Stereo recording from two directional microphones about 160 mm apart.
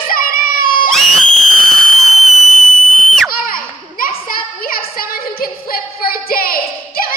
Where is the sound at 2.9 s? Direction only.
5° left (ahead or behind).